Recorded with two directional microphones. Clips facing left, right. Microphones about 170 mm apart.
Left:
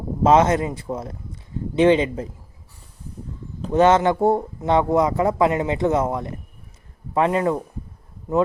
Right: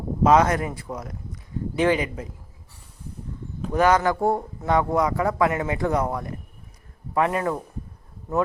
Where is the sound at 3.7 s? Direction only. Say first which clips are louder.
Left 4 dB; 25° left (ahead or behind).